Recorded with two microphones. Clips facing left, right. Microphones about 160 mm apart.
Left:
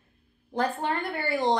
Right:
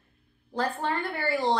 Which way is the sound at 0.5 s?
20° left (ahead or behind).